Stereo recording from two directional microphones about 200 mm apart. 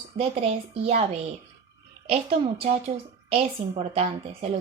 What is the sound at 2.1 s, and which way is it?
Speech, 30° right (ahead or behind).